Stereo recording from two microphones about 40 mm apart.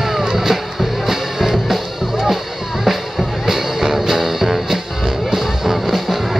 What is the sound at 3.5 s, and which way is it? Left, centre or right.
Music, centre.